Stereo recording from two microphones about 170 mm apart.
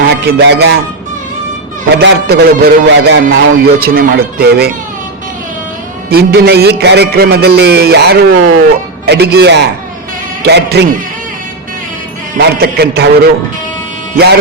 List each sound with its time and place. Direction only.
0.1 s music: 80° right
2.0 s a man's voice: 75° right (ahead or behind)
6.1 s a man's voice: 65° right (ahead or behind); by 8.6 s 80° right
9.0 s a man's voice: 70° right (ahead or behind)
12.4 s a man's voice: 70° right (ahead or behind)